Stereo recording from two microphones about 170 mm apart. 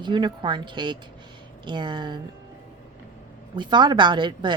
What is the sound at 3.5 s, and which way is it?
A woman's voice, 25° right (ahead or behind).